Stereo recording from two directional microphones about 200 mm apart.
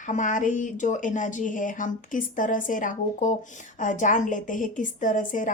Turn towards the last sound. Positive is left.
turn(degrees=40)  # may be behind; listen again after turning